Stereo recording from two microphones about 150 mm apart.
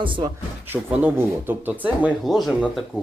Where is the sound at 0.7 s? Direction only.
15° right (ahead or behind).